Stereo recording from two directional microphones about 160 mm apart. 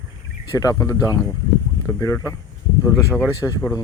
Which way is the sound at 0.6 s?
20° left (ahead or behind).